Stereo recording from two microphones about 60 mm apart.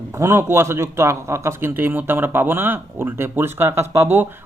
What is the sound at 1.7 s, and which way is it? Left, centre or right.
Speech, right.